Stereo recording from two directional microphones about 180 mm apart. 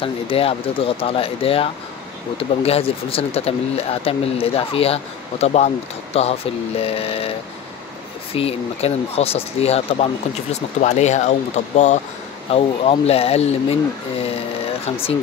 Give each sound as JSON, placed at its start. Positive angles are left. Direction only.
{"t": 0.0, "sound": "speech", "side_deg": 30}
{"t": 8.4, "sound": "speech", "side_deg": 35}